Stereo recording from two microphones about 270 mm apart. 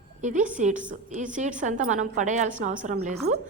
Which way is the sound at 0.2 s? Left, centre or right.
Right.